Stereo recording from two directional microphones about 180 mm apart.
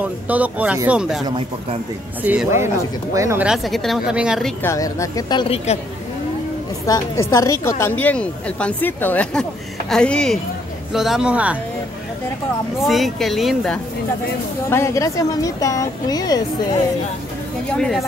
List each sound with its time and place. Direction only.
0.0 s speech: 10° right (ahead or behind)
1.2 s speech: 25° right (ahead or behind)
2.2 s speech: 10° right (ahead or behind)
3.4 s a woman's voice: centre (ahead or behind)
4.6 s a woman's voice: 20° left (ahead or behind)
6.9 s a woman's voice: 15° left (ahead or behind); by 11.5 s 5° right (ahead or behind)
12.8 s a woman's voice: centre (ahead or behind)
14.7 s speech: 15° left (ahead or behind)
17.6 s a woman's voice: 5° left (ahead or behind)